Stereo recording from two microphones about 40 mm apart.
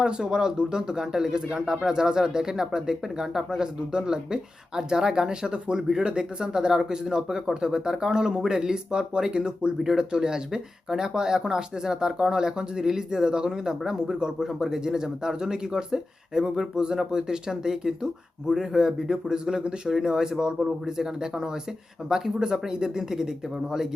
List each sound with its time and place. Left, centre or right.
0.0 s speech: centre
9.7 s speech: centre